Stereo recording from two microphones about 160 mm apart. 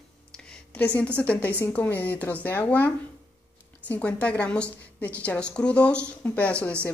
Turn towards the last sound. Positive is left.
turn(degrees=10)  # may be behind; listen again after turning